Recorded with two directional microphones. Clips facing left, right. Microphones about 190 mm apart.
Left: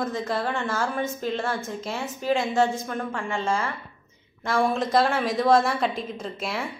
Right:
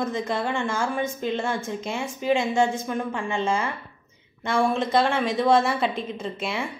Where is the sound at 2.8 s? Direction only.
15° right (ahead or behind).